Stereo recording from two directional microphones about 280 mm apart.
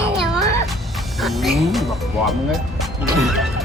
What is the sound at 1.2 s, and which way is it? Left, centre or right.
Speech, centre.